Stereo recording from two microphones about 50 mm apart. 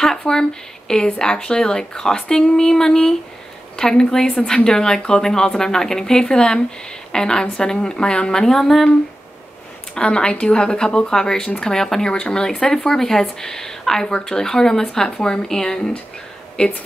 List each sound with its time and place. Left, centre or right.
0.0 s a woman's voice: centre
9.9 s speech: centre